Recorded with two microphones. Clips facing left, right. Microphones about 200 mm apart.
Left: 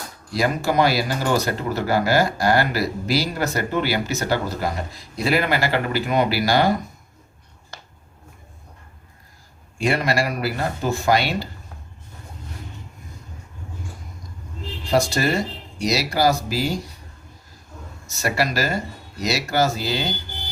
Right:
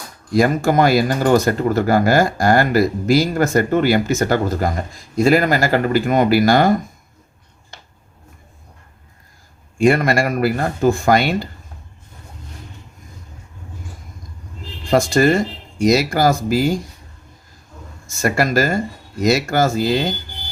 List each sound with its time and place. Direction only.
0.3 s speech: 50° right (ahead or behind)
9.7 s speech: 50° right (ahead or behind)
14.8 s speech: 50° right (ahead or behind)
18.0 s speech: 50° right (ahead or behind)